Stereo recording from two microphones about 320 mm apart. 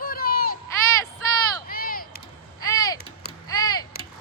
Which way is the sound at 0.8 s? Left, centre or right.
Centre.